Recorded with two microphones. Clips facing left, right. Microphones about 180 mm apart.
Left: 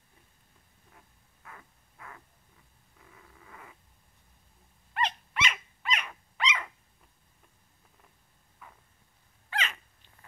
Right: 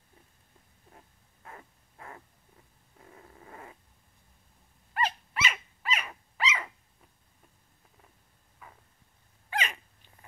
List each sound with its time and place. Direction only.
0.9 s a sound: 35° right (ahead or behind)
4.9 s dog: 5° right (ahead or behind)
9.5 s dog: 15° right (ahead or behind)